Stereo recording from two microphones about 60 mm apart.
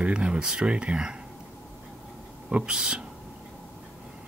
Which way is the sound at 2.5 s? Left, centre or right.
Centre.